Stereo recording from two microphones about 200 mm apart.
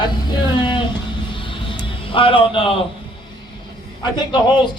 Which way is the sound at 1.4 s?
25° left (ahead or behind).